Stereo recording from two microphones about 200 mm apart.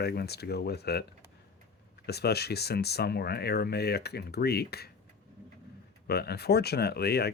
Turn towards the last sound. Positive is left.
turn(degrees=55)  # may be behind; listen again after turning